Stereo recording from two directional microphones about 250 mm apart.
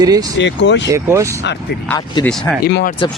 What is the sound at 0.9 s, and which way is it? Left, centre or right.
Speech, centre.